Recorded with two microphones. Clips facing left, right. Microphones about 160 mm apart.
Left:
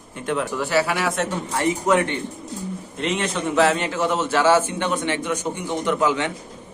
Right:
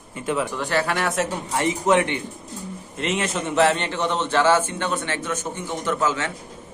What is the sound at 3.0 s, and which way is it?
Speech, centre (ahead or behind).